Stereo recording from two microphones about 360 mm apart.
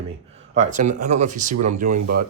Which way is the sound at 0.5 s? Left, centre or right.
Centre.